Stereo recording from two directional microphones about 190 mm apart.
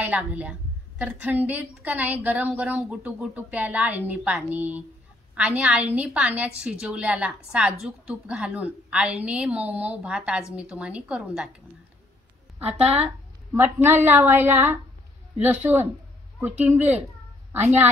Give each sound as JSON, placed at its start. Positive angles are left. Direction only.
{"t": 0.0, "sound": "a woman's voice", "side_deg": -10}
{"t": 12.6, "sound": "speech", "side_deg": -30}
{"t": 13.8, "sound": "a woman's voice", "side_deg": -10}